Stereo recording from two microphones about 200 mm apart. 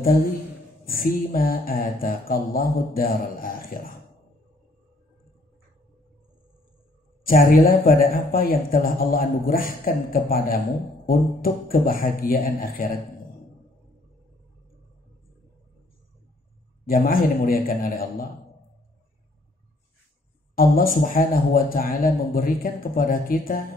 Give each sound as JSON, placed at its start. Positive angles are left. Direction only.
{"t": 0.8, "sound": "speech", "side_deg": 45}
{"t": 7.2, "sound": "speech", "side_deg": 45}
{"t": 16.8, "sound": "speech", "side_deg": 45}
{"t": 20.5, "sound": "speech", "side_deg": 45}